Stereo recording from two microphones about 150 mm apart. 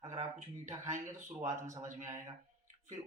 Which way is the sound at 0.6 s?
20° right (ahead or behind).